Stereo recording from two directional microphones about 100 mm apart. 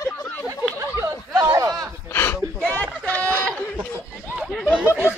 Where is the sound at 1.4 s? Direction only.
25° right (ahead or behind).